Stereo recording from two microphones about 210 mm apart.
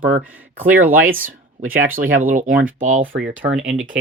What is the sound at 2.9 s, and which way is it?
Speech, 65° right (ahead or behind).